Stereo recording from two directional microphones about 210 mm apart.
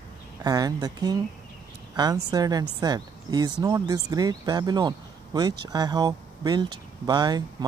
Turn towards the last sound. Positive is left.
turn(degrees=-20)  # may be behind; listen again after turning